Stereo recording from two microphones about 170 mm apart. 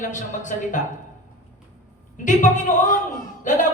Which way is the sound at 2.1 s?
50° left (ahead or behind).